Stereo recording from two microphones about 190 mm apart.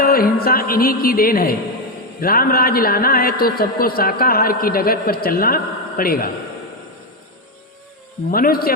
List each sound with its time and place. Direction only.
0.0 s a man's voice: 50° left (ahead or behind)
8.3 s a man's voice: 50° left (ahead or behind)